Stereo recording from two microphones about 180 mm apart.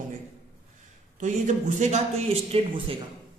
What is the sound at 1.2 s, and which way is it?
Speech, 40° right (ahead or behind).